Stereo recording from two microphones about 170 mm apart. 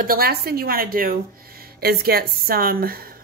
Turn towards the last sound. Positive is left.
turn(degrees=-60)  # may be behind; listen again after turning